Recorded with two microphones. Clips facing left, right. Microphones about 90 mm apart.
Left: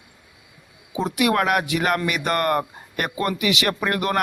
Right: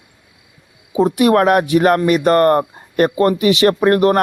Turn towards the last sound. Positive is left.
turn(degrees=-35)  # may be behind; listen again after turning